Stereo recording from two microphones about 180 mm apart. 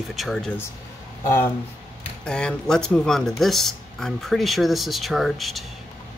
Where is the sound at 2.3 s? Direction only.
5° left (ahead or behind).